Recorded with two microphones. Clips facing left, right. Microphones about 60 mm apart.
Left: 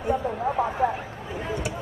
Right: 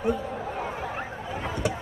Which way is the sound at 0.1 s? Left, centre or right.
Left.